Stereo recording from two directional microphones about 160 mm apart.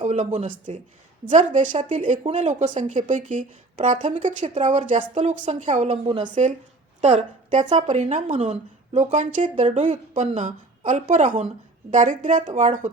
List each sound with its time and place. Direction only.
0.0 s speech: 45° right (ahead or behind)
7.0 s a woman's voice: 45° right (ahead or behind)